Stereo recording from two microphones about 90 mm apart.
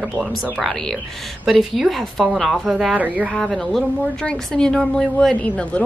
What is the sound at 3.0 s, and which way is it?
Speech, 15° right (ahead or behind).